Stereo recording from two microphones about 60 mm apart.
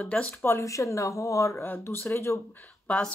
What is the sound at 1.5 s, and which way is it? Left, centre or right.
Speech, left.